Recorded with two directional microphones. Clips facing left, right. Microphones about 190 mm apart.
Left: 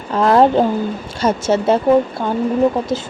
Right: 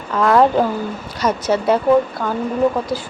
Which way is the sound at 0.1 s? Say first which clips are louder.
Left 2 dB; 30° left (ahead or behind).